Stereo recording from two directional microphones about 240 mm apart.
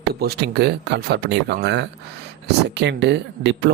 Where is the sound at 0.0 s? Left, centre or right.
Right.